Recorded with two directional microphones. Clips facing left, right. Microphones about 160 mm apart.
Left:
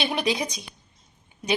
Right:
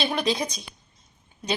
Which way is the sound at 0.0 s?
15° left (ahead or behind).